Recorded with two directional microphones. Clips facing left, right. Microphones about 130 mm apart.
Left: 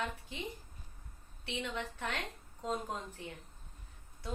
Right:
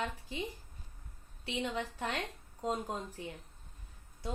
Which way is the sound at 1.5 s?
30° right (ahead or behind).